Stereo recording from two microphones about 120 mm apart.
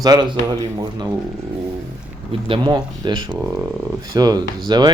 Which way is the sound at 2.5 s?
35° right (ahead or behind).